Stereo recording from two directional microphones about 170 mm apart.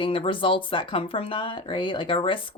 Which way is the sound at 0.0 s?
30° left (ahead or behind).